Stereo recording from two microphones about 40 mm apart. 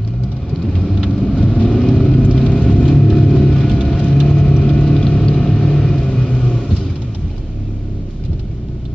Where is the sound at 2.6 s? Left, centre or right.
Left.